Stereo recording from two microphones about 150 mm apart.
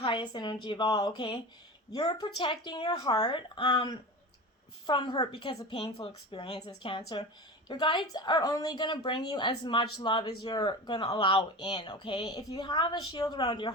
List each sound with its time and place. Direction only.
0.0 s a woman's voice: 30° left (ahead or behind)